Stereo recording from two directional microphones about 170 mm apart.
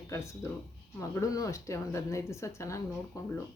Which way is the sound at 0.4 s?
15° left (ahead or behind).